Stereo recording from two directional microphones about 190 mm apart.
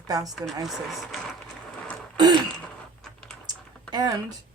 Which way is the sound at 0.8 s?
Centre (ahead or behind).